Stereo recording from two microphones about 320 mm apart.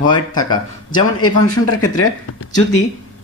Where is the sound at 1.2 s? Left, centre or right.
Left.